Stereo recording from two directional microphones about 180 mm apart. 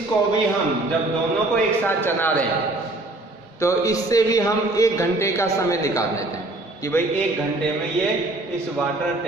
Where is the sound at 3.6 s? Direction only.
15° left (ahead or behind).